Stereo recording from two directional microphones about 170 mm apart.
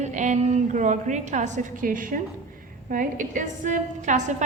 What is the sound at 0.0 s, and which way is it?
A woman's voice, 45° right (ahead or behind).